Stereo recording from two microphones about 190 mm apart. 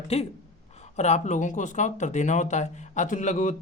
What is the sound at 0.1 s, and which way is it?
Speech, 35° left (ahead or behind).